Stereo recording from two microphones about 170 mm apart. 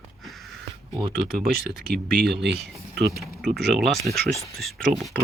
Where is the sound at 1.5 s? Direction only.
65° right (ahead or behind).